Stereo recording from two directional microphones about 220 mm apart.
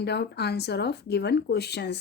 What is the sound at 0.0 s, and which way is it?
Speech, 50° left (ahead or behind).